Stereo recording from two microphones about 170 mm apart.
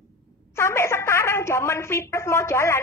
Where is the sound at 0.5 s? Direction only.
15° left (ahead or behind).